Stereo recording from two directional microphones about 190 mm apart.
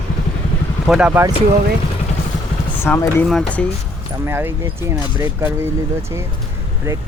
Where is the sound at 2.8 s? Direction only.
10° left (ahead or behind).